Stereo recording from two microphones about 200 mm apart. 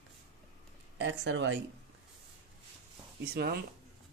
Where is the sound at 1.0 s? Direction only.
65° right (ahead or behind).